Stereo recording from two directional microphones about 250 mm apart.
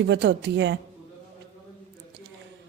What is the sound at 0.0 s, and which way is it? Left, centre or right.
Speech, right.